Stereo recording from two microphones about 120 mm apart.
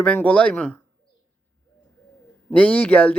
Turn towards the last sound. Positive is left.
turn(degrees=10)  # may be behind; listen again after turning